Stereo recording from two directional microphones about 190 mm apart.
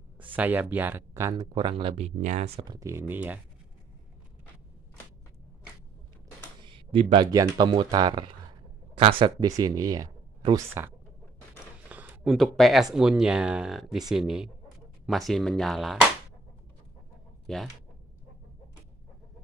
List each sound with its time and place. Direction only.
0.4 s speech: 10° right (ahead or behind)
1.5 s speech: 25° right (ahead or behind); by 3.3 s 10° right (ahead or behind)
6.6 s speech: 25° right (ahead or behind)
11.9 s a sound: 10° right (ahead or behind)
12.9 s speech: 5° right (ahead or behind)
17.5 s speech: centre (ahead or behind)